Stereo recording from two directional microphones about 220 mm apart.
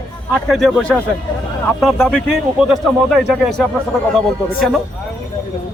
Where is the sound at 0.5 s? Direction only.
Centre (ahead or behind).